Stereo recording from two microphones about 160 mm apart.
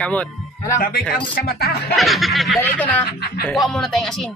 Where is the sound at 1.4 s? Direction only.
75° left (ahead or behind).